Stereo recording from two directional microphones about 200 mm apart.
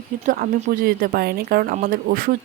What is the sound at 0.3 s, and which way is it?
Speech, 45° right (ahead or behind).